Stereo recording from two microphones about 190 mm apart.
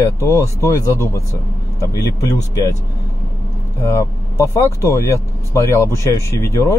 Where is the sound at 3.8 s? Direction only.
15° left (ahead or behind).